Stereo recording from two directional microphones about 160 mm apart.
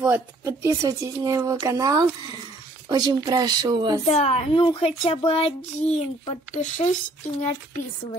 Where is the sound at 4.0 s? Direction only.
45° left (ahead or behind).